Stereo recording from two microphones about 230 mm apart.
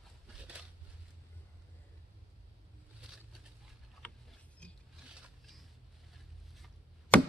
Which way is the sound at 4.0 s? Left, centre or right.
Centre.